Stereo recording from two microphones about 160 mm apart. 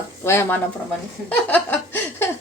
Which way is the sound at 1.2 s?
10° left (ahead or behind).